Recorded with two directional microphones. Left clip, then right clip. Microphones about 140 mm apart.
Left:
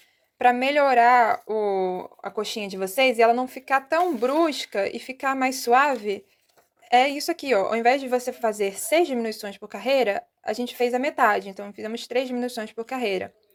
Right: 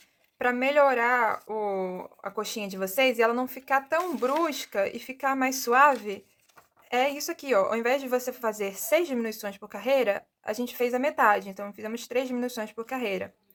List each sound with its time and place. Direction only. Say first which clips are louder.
0.6 s speech: left 1 dB; 20° left (ahead or behind)